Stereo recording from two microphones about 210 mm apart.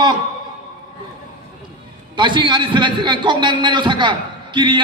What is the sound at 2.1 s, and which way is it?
A man's voice, 20° right (ahead or behind).